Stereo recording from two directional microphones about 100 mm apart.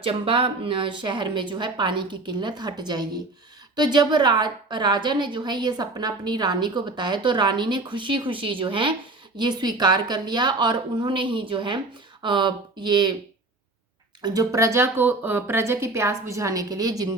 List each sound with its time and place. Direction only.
0.0 s a woman's voice: 60° right (ahead or behind)
9.4 s a woman's voice: 45° right (ahead or behind)
14.2 s speech: 45° right (ahead or behind)
14.5 s a woman's voice: 30° right (ahead or behind)